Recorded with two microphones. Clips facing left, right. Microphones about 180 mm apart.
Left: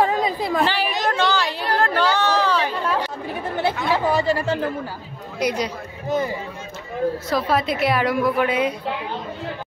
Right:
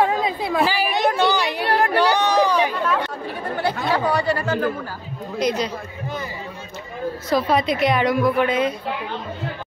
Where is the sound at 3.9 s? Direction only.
25° left (ahead or behind).